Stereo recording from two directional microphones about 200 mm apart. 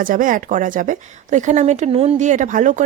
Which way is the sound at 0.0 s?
45° right (ahead or behind).